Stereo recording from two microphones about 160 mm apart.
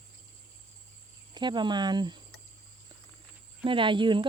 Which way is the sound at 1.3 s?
30° right (ahead or behind).